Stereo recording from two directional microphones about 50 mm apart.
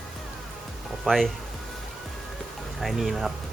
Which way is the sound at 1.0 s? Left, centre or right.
Centre.